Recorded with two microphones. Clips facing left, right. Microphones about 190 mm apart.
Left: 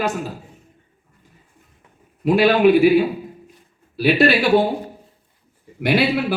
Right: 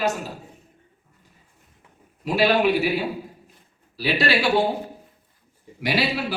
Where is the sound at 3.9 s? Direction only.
55° left (ahead or behind).